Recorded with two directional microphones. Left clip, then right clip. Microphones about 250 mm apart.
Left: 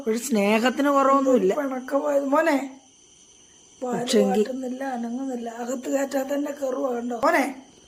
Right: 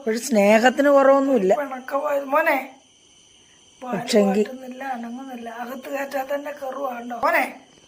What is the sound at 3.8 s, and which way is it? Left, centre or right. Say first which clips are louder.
Speech: right 2 dB; centre.